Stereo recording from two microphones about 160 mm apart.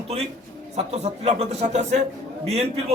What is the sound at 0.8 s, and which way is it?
Speech, 40° right (ahead or behind).